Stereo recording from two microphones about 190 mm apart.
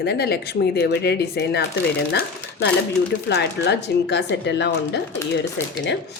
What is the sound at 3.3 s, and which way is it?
A woman's voice, 60° left (ahead or behind).